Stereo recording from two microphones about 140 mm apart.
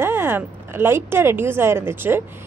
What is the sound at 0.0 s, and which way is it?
A woman's voice, 15° right (ahead or behind).